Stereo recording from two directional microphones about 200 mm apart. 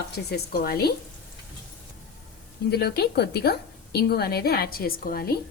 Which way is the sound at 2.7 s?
55° left (ahead or behind).